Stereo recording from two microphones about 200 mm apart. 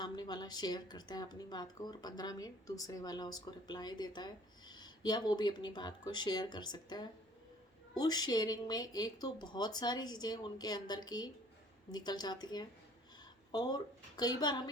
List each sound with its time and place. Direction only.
0.0 s a woman's voice: 20° left (ahead or behind)